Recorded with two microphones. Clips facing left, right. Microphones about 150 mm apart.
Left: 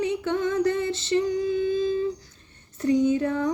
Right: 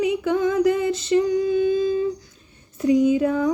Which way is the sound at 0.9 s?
30° left (ahead or behind).